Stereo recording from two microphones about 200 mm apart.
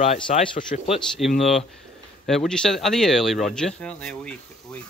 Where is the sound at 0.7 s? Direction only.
40° left (ahead or behind).